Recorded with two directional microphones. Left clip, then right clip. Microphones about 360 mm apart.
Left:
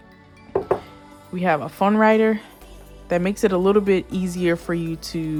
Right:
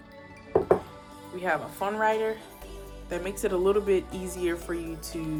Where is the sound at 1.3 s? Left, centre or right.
Centre.